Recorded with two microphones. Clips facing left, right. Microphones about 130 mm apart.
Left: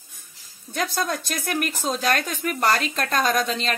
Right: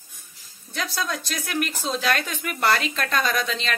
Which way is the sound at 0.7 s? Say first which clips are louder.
Left 3 dB; 50° left (ahead or behind).